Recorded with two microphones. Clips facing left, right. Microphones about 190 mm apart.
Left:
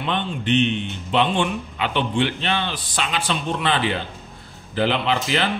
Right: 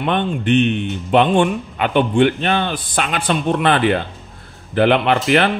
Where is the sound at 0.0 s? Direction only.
55° right (ahead or behind).